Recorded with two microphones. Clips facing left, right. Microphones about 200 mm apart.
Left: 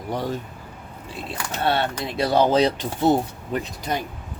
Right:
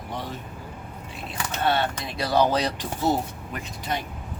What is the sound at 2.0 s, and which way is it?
Speech, 25° left (ahead or behind).